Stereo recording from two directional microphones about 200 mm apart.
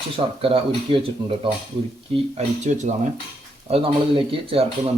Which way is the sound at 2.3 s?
35° right (ahead or behind).